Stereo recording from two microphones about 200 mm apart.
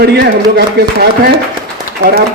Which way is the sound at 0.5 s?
50° right (ahead or behind).